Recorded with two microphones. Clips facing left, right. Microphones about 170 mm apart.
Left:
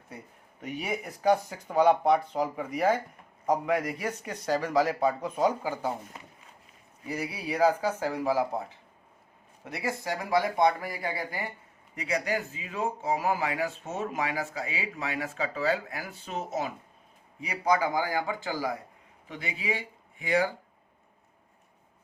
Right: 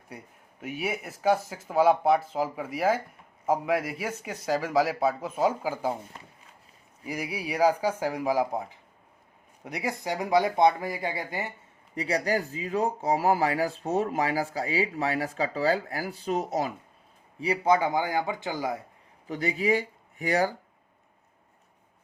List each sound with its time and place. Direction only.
0.6 s a man's voice: 5° right (ahead or behind)
7.0 s speech: 10° right (ahead or behind)
9.6 s speech: 15° right (ahead or behind)
11.9 s speech: 35° right (ahead or behind)
19.3 s speech: 40° right (ahead or behind)